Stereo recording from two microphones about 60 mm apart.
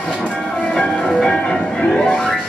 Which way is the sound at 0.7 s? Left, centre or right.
Centre.